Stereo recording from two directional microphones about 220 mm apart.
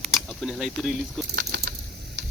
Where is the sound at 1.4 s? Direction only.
50° right (ahead or behind).